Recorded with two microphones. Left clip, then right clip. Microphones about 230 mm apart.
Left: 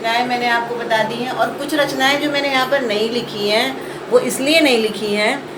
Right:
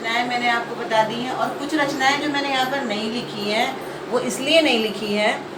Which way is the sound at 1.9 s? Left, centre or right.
Left.